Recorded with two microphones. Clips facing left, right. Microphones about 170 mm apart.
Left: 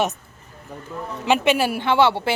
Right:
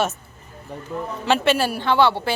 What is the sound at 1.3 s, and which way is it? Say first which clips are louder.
A woman's voice: left 1 dB; 15° left (ahead or behind).